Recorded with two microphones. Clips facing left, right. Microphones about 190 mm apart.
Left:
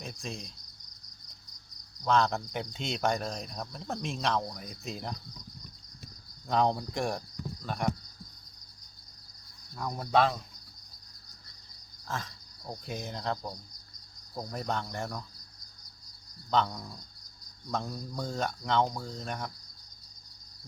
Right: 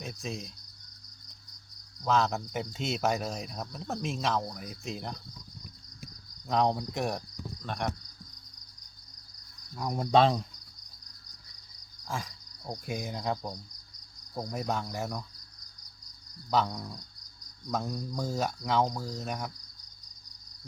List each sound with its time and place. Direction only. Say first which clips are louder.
0.0 s speech: right 2 dB; 5° right (ahead or behind)
2.0 s speech: left 1 dB; 5° right (ahead or behind)
6.5 s speech: even; centre (ahead or behind)
10.0 s cricket: right 3 dB; 25° right (ahead or behind)
12.0 s cricket: right 1 dB; 10° right (ahead or behind)
14.3 s speech: right 1 dB; 10° right (ahead or behind)
16.5 s speech: even; 10° right (ahead or behind)